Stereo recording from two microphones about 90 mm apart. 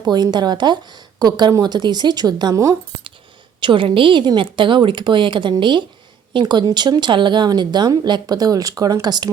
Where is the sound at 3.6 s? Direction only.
70° right (ahead or behind).